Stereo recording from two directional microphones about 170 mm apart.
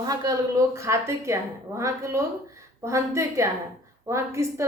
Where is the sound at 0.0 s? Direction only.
20° right (ahead or behind).